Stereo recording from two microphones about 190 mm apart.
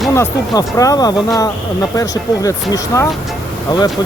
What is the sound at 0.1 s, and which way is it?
Speech, 15° left (ahead or behind).